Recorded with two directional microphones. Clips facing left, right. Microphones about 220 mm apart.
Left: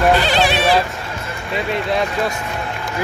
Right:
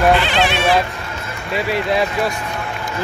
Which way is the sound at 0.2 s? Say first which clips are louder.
Left 1 dB; 40° left (ahead or behind).